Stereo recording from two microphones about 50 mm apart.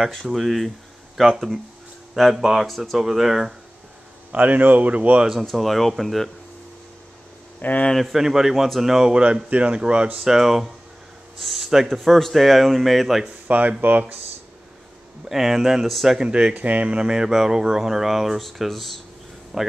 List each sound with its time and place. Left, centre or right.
0.3 s a man's voice: centre
4.3 s speech: right
5.4 s a man's voice: centre
7.9 s a man's voice: centre
9.1 s speech: right
10.2 s a man's voice: centre
13.5 s speech: right
15.2 s a man's voice: centre
16.2 s a man's voice: centre